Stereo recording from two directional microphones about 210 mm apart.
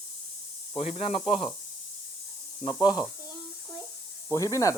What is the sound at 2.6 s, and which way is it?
Speech, 20° left (ahead or behind).